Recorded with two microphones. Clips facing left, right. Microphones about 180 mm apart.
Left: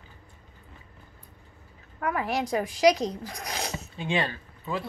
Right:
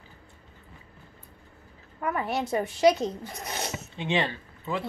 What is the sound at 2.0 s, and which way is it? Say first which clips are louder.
Speech: left 1 dB; centre (ahead or behind).